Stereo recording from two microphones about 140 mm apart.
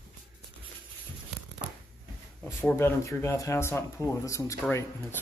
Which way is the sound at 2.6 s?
15° left (ahead or behind).